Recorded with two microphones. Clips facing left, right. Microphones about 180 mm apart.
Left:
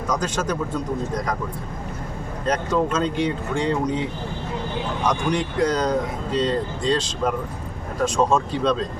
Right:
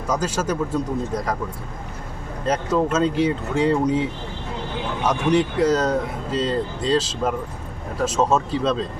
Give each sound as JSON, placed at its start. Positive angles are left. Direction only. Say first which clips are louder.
{"t": 0.1, "sound": "speech", "louder": "right 2 dB", "side_deg": -5}
{"t": 2.5, "sound": "speech", "louder": "right 1 dB", "side_deg": -5}